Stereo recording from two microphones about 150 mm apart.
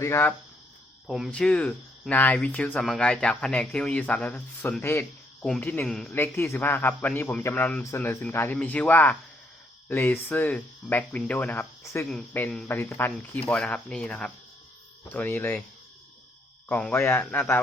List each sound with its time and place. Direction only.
0.0 s speech: 15° left (ahead or behind)
1.0 s speech: centre (ahead or behind)
11.8 s speech: 20° left (ahead or behind)
16.6 s speech: 10° left (ahead or behind)